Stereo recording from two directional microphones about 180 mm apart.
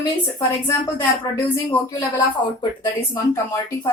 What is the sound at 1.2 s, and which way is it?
Speech, 20° left (ahead or behind).